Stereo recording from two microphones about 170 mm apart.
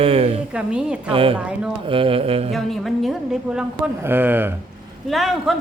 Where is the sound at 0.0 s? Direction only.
35° right (ahead or behind).